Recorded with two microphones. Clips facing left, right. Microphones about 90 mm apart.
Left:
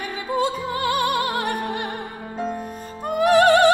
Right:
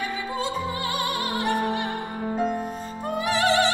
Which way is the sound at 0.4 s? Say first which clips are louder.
Left 6 dB; 60° left (ahead or behind).